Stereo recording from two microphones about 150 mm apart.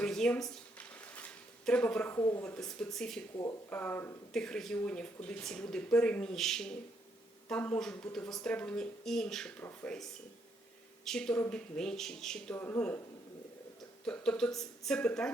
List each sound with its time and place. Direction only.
0.0 s a sound: 5° left (ahead or behind)
2.1 s speech: 20° left (ahead or behind)
2.4 s a woman's voice: 5° left (ahead or behind)
14.0 s a woman's voice: 5° left (ahead or behind)